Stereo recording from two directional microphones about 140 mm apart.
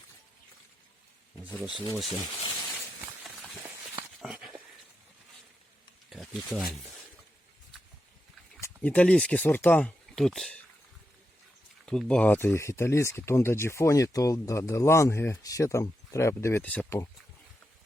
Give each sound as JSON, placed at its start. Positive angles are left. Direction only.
{"t": 1.7, "sound": "speech", "side_deg": 35}
{"t": 4.2, "sound": "dog", "side_deg": -5}
{"t": 6.1, "sound": "a sound", "side_deg": 0}
{"t": 8.6, "sound": "speech", "side_deg": 10}
{"t": 11.9, "sound": "speech", "side_deg": 5}